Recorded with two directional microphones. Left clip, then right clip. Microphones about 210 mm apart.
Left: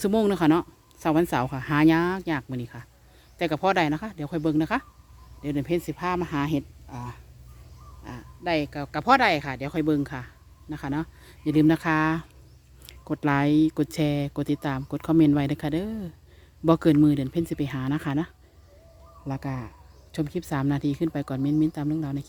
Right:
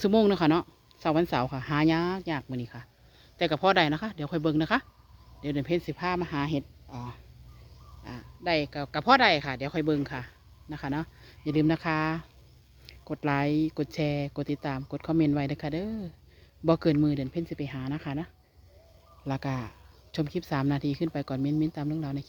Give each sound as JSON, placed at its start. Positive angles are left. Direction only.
{"t": 0.0, "sound": "speech", "side_deg": 0}
{"t": 19.2, "sound": "speech", "side_deg": 0}